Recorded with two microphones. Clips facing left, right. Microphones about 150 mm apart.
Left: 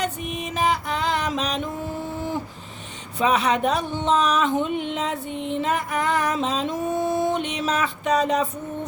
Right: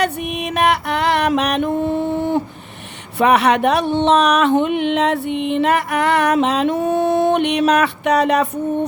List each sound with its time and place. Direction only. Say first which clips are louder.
0.0 s music: right 7 dB; 70° right (ahead or behind)
3.2 s speech: right 7 dB; 70° right (ahead or behind)